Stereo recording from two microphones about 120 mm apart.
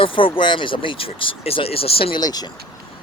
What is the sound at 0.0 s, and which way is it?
Speech, 45° left (ahead or behind).